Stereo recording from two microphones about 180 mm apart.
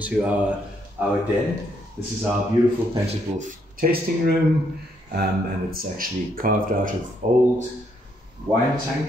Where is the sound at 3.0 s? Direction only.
45° right (ahead or behind).